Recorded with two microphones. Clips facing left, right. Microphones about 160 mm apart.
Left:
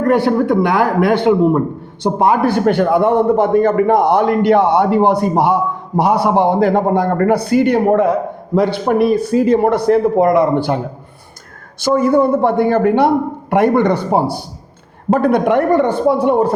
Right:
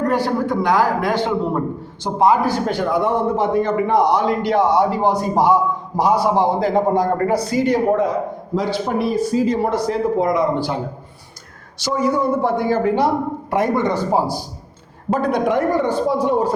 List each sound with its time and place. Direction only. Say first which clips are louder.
0.1 s a man's voice: left 6 dB; 60° left (ahead or behind)
11.8 s a man's voice: left 7 dB; 55° left (ahead or behind)